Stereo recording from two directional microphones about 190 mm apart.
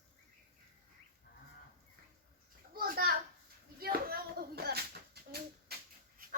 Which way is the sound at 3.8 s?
50° right (ahead or behind).